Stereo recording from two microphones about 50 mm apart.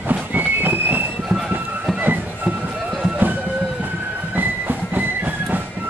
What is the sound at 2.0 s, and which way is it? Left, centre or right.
Music, right.